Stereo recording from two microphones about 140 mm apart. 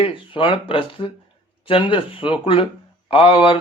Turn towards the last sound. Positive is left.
turn(degrees=40)  # may be behind; listen again after turning